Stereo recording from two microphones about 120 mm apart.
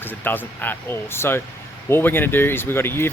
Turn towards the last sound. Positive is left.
turn(degrees=20)  # may be behind; listen again after turning